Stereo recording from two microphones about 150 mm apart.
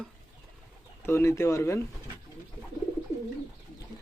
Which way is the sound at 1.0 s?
20° left (ahead or behind).